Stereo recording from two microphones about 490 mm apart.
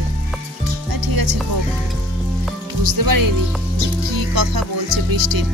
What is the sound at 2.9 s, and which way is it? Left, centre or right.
Speech, right.